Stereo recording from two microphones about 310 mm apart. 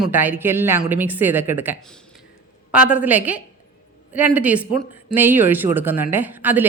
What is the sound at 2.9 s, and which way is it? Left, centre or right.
Speech, centre.